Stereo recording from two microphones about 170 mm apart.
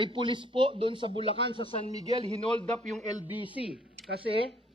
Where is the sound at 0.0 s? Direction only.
30° right (ahead or behind).